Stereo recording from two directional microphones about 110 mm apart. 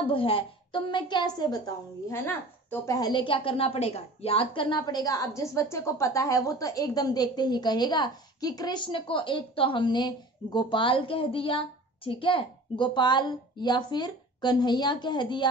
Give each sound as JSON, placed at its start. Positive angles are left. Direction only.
{"t": 0.0, "sound": "a woman's voice", "side_deg": 55}
{"t": 2.0, "sound": "a woman's voice", "side_deg": 20}
{"t": 3.1, "sound": "a woman's voice", "side_deg": 50}